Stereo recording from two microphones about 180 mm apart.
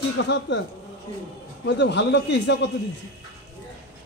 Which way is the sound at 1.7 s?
75° left (ahead or behind).